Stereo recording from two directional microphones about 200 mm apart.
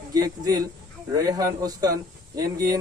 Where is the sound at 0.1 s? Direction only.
20° right (ahead or behind).